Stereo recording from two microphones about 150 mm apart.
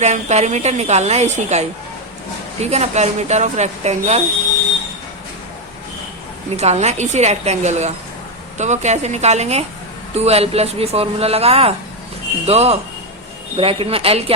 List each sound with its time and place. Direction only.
0.0 s a woman's voice: 50° right (ahead or behind)
2.6 s a woman's voice: 45° right (ahead or behind)
6.6 s a woman's voice: 50° right (ahead or behind)